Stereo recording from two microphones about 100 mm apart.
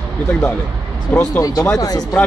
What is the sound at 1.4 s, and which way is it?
Speech, 35° left (ahead or behind).